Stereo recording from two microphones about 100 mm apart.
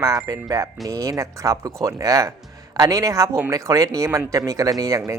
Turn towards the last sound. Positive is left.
turn(degrees=-30)  # may be behind; listen again after turning